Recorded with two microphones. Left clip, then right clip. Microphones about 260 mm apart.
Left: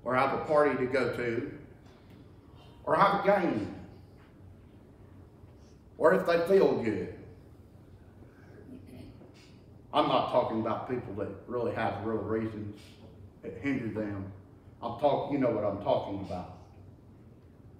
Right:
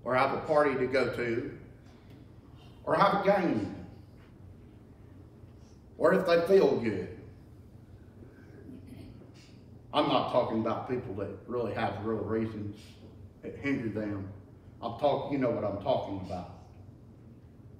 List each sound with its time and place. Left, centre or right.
0.0 s a man's voice: centre
2.8 s a man's voice: centre
5.9 s a man's voice: centre
9.8 s a man's voice: centre